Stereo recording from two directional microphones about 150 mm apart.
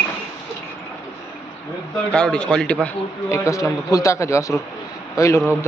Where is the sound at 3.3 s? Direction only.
20° left (ahead or behind).